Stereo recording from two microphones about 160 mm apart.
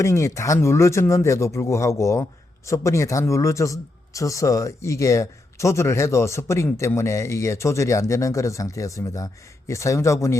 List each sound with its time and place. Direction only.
0.0 s speech: 15° left (ahead or behind)